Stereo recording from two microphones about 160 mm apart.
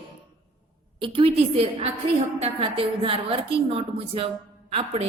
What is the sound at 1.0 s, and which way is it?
A woman's voice, 35° right (ahead or behind).